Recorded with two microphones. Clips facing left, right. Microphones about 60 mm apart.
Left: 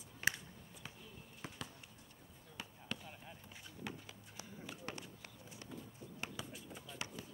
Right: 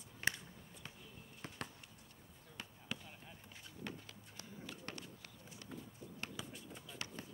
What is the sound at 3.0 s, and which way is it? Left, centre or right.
Run, centre.